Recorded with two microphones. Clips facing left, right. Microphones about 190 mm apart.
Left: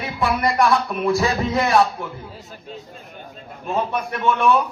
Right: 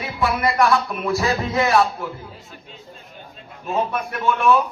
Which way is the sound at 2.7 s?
40° left (ahead or behind).